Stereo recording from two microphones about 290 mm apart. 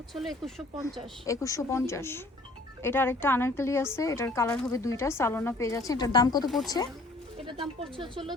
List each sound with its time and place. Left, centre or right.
0.1 s speech: centre
7.5 s speech: centre